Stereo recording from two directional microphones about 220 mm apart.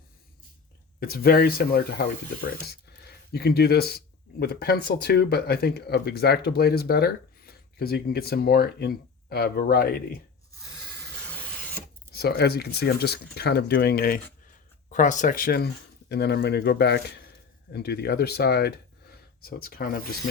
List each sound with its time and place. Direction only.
0.9 s speech: 45° left (ahead or behind)
12.1 s speech: 45° left (ahead or behind)